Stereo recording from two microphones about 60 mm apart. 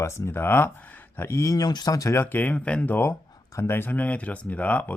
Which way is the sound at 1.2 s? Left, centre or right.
Left.